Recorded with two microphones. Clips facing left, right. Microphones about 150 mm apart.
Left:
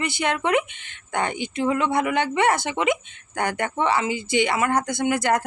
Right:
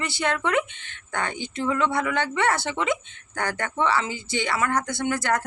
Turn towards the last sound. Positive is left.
turn(degrees=15)  # may be behind; listen again after turning